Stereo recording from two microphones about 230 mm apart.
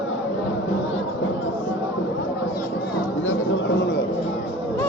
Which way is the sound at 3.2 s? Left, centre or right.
Left.